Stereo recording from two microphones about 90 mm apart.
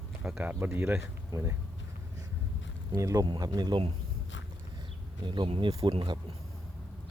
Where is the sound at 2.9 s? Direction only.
40° right (ahead or behind).